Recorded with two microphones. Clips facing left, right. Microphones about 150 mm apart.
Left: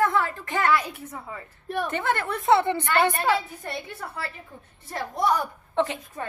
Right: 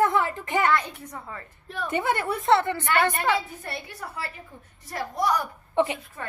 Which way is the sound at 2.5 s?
15° left (ahead or behind).